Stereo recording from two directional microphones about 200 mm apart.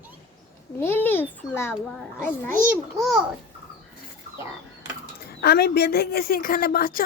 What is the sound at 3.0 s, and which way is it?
Speech, centre (ahead or behind).